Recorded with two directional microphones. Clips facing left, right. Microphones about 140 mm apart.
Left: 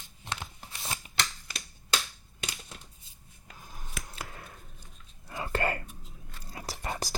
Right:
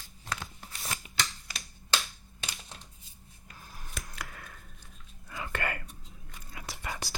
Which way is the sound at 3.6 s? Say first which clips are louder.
Left 1 dB; 15° left (ahead or behind).